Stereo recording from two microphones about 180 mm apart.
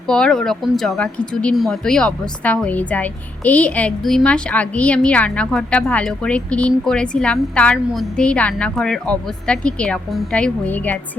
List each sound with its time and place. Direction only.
0.1 s speech: 5° left (ahead or behind)